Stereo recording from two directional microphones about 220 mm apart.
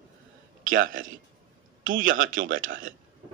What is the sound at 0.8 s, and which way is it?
Speech, 65° right (ahead or behind).